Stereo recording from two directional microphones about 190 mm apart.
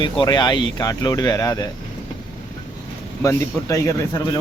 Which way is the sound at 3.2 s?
15° left (ahead or behind).